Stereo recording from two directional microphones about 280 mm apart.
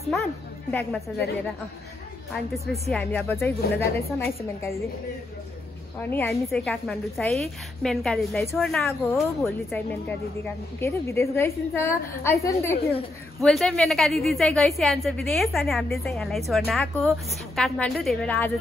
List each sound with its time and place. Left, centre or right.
0.1 s a woman's voice: centre
2.5 s a woman's voice: centre
5.9 s a woman's voice: centre